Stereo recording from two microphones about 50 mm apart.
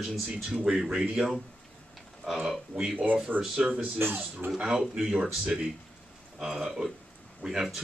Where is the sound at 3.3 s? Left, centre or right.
Right.